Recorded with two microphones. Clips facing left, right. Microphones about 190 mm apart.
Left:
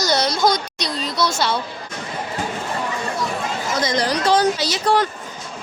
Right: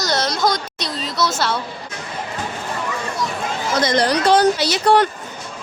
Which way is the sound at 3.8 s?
65° right (ahead or behind).